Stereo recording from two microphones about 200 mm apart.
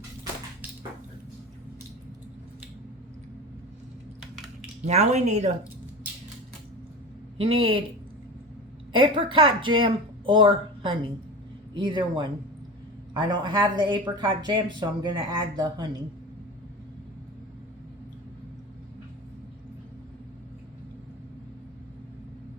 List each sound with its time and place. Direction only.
4.9 s speech: 35° right (ahead or behind)
7.3 s speech: 25° right (ahead or behind)
8.9 s a woman's voice: 25° right (ahead or behind)